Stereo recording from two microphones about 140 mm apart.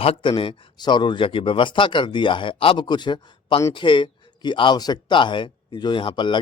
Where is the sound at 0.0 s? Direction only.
40° left (ahead or behind).